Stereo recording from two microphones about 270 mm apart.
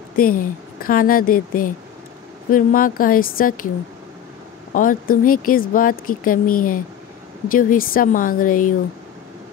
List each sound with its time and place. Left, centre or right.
0.1 s speech: left
4.7 s speech: left